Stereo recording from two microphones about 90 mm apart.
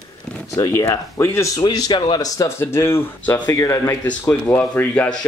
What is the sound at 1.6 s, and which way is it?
Speech, 50° left (ahead or behind).